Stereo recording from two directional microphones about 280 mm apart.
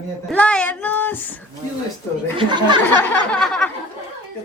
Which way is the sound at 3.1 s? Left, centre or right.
Centre.